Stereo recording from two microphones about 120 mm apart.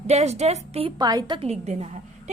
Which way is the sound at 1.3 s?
65° right (ahead or behind).